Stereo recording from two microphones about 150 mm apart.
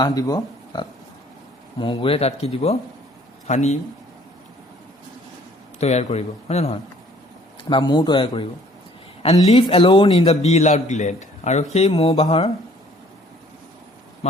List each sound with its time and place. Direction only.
0.0 s speech: 25° left (ahead or behind); by 3.8 s 50° left (ahead or behind)
5.8 s a man's voice: 45° left (ahead or behind)
7.7 s speech: 30° left (ahead or behind)
9.2 s a man's voice: 45° left (ahead or behind)
9.6 s speech: 35° left (ahead or behind)
10.2 s a man's voice: 50° left (ahead or behind)